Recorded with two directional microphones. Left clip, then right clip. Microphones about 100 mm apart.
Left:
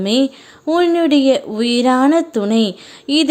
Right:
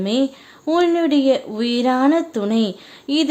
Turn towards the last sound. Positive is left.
turn(degrees=35)  # may be behind; listen again after turning